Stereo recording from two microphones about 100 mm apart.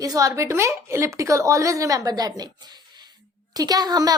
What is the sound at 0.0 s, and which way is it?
A woman's voice, 35° right (ahead or behind).